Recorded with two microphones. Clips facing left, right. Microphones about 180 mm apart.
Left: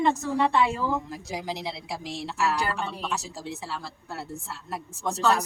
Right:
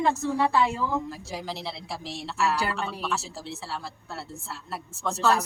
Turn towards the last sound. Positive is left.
turn(degrees=15)  # may be behind; listen again after turning